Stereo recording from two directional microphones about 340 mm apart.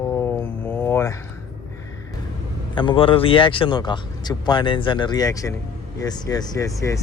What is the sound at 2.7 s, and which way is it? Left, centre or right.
Speech, centre.